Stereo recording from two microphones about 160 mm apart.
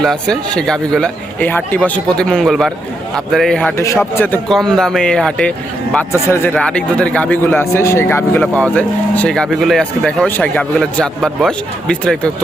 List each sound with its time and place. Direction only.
0.0 s speech: 5° left (ahead or behind)
3.8 s speech: 15° left (ahead or behind)
4.4 s speech: 5° left (ahead or behind)